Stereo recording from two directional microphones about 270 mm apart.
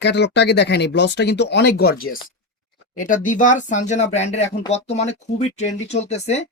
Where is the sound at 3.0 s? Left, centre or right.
Left.